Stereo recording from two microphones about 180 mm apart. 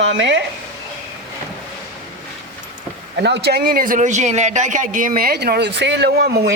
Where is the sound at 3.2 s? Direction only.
70° right (ahead or behind).